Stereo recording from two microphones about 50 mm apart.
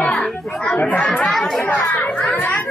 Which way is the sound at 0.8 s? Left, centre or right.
Left.